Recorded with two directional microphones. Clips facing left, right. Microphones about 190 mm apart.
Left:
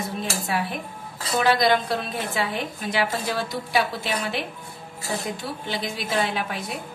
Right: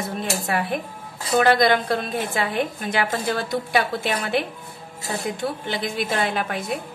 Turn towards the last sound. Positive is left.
turn(degrees=-55)  # may be behind; listen again after turning